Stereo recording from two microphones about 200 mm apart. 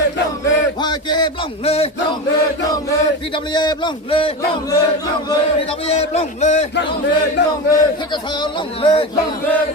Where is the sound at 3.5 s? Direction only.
20° left (ahead or behind).